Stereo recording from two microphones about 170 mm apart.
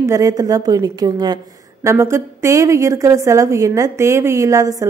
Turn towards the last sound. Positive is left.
turn(degrees=-20)  # may be behind; listen again after turning